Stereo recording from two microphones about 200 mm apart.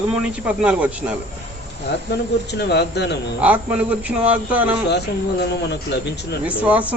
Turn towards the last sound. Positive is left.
turn(degrees=-5)  # may be behind; listen again after turning